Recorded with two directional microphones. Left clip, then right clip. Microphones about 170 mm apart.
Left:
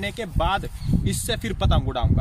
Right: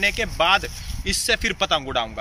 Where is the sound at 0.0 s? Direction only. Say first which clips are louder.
Right 6 dB; 20° left (ahead or behind).